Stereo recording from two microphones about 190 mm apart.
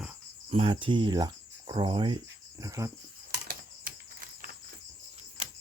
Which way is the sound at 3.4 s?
50° right (ahead or behind).